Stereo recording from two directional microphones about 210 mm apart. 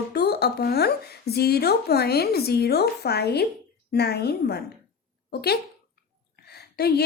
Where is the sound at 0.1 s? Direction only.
50° left (ahead or behind).